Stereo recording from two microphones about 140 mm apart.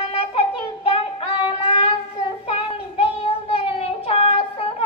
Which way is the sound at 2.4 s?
40° left (ahead or behind).